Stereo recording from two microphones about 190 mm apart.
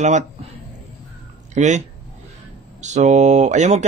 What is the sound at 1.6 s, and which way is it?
Speech, 35° right (ahead or behind).